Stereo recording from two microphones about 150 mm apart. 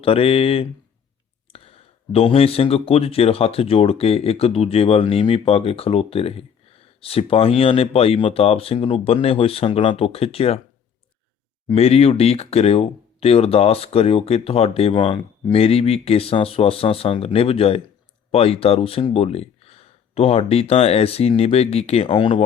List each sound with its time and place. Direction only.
0.0 s speech: 40° left (ahead or behind)
2.1 s speech: 40° left (ahead or behind)
11.7 s speech: 40° left (ahead or behind)